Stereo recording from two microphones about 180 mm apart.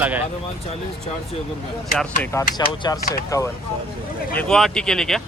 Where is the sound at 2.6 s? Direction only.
20° left (ahead or behind).